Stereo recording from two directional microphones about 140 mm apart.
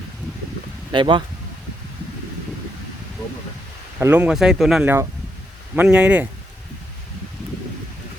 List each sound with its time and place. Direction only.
0.9 s speech: 35° right (ahead or behind)
4.0 s speech: 10° right (ahead or behind)
4.8 s speech: 15° right (ahead or behind)